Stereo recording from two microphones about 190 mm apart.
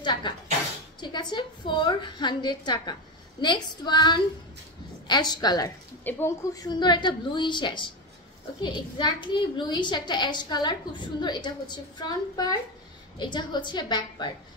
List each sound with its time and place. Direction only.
0.0 s a woman's voice: 25° left (ahead or behind)